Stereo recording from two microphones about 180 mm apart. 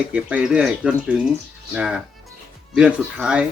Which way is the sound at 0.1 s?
5° right (ahead or behind).